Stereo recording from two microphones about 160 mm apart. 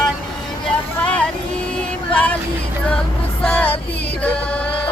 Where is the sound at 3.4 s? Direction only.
10° left (ahead or behind).